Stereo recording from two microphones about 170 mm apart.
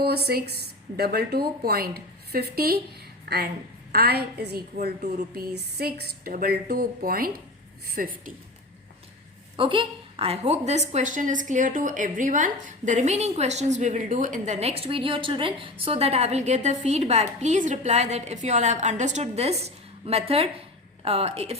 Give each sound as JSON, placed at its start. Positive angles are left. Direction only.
{"t": 0.3, "sound": "a woman's voice", "side_deg": -70}
{"t": 4.9, "sound": "speech", "side_deg": -55}
{"t": 9.6, "sound": "a woman's voice", "side_deg": -30}